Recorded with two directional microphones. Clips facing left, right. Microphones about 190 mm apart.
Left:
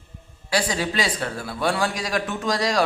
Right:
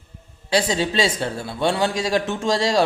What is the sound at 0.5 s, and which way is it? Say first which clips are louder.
A man's voice: right 3 dB; 25° right (ahead or behind).